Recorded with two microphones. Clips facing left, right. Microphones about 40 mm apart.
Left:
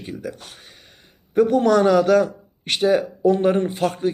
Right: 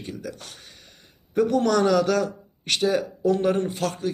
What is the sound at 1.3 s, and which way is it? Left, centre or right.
A man's voice, centre.